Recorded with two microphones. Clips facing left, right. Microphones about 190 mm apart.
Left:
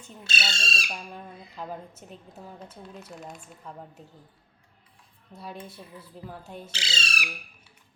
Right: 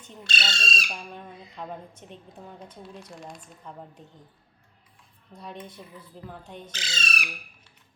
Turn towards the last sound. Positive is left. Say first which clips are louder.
# even
turn(degrees=10)  # may be behind; listen again after turning